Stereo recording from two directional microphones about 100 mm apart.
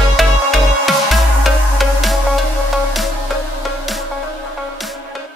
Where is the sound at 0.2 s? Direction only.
Centre (ahead or behind).